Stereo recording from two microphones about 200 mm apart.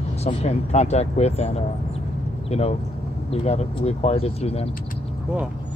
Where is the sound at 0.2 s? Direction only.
35° left (ahead or behind).